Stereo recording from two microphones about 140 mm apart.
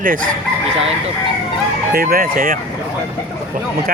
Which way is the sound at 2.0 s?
90° right.